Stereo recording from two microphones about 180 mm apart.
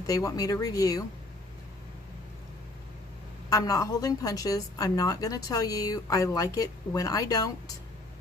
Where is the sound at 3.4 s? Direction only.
20° left (ahead or behind).